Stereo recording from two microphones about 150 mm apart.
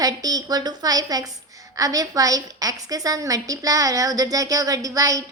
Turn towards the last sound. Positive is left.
turn(degrees=-20)  # may be behind; listen again after turning